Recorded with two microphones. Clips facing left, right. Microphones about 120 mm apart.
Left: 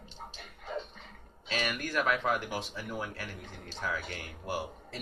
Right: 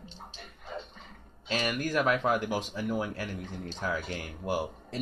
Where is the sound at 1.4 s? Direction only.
35° right (ahead or behind).